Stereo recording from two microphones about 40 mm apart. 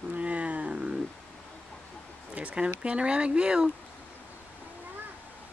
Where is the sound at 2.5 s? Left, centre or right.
Right.